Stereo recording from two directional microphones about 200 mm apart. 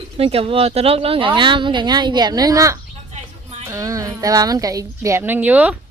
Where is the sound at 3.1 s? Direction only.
35° right (ahead or behind).